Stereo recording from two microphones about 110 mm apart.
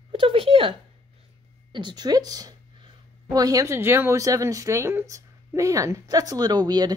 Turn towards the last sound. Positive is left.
turn(degrees=-40)  # may be behind; listen again after turning